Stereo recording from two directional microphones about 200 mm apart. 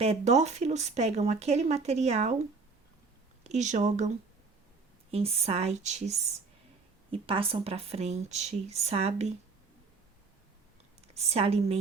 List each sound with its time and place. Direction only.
0.0 s speech: 35° right (ahead or behind)
3.4 s speech: 35° right (ahead or behind)
5.1 s speech: 30° right (ahead or behind)
11.1 s speech: 30° right (ahead or behind)